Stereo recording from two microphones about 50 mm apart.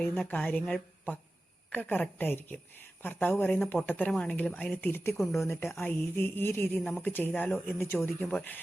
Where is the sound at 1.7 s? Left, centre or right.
Left.